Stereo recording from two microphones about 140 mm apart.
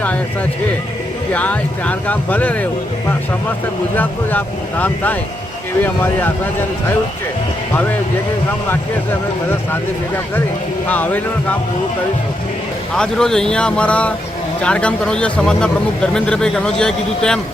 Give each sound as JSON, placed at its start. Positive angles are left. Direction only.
{"t": 1.3, "sound": "speech", "side_deg": 10}
{"t": 3.9, "sound": "speech", "side_deg": 15}
{"t": 10.8, "sound": "speech", "side_deg": 10}
{"t": 13.0, "sound": "speech", "side_deg": 5}